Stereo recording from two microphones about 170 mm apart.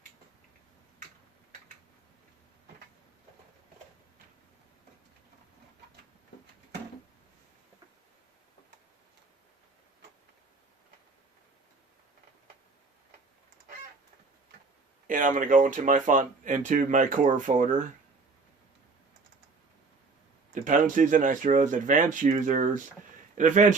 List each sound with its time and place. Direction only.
15.0 s speech: 50° right (ahead or behind)
20.5 s speech: 50° right (ahead or behind)